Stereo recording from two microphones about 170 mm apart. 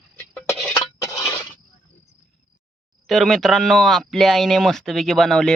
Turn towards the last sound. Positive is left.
turn(degrees=0)  # may be behind; listen again after turning